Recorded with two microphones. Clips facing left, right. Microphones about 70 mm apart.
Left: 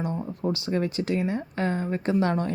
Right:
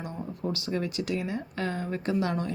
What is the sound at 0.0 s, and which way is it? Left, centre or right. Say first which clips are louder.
Speech: left 5 dB; left.